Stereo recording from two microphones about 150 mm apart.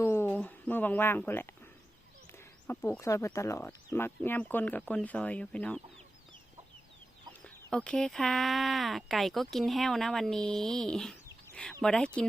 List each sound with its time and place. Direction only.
0.0 s a sound: 15° left (ahead or behind)
2.6 s speech: 15° left (ahead or behind)
7.4 s speech: 5° left (ahead or behind)